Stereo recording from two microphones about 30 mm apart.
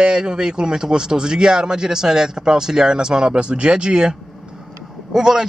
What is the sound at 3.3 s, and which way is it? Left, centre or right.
Speech, right.